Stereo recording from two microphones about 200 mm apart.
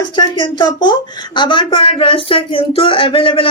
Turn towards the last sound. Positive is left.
turn(degrees=25)  # may be behind; listen again after turning